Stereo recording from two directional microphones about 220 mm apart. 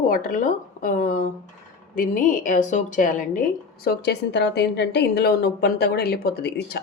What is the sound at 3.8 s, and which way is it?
A woman's voice, 50° left (ahead or behind).